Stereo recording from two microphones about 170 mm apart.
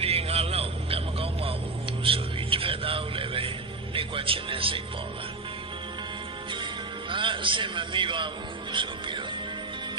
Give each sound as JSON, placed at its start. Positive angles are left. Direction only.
{"t": 0.0, "sound": "music", "side_deg": -35}
{"t": 7.1, "sound": "music", "side_deg": -30}
{"t": 8.7, "sound": "speech", "side_deg": -30}